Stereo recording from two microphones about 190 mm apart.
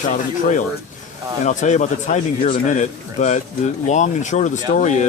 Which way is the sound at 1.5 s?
40° left (ahead or behind).